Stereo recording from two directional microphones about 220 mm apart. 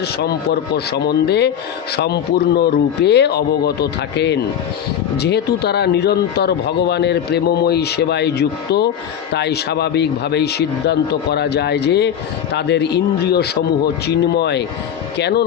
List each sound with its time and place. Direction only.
0.9 s speech: 50° left (ahead or behind)
2.6 s speech: 50° left (ahead or behind)